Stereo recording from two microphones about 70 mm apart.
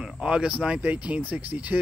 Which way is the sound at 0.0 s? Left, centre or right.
Centre.